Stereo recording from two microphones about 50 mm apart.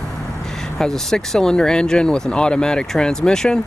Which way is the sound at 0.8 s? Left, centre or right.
Centre.